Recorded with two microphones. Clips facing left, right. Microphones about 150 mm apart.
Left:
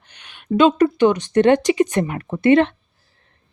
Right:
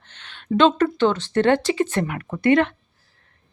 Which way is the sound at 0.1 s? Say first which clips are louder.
Left 2 dB; 15° left (ahead or behind).